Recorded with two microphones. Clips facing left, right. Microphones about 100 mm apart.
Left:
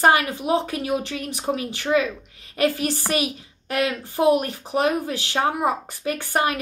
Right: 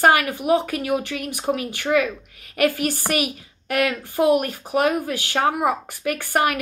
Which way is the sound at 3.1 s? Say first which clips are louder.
Even; 25° left (ahead or behind).